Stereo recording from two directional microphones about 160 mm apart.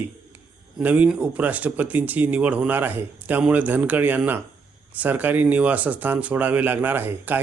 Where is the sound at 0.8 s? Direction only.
10° right (ahead or behind).